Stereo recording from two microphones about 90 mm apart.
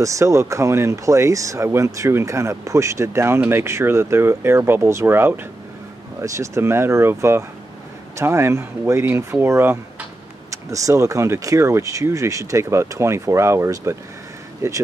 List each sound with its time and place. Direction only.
0.0 s speech: 35° right (ahead or behind)
10.5 s speech: 35° right (ahead or behind)